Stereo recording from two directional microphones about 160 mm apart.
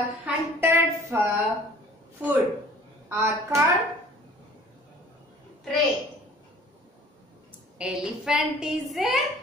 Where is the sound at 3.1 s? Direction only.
15° right (ahead or behind).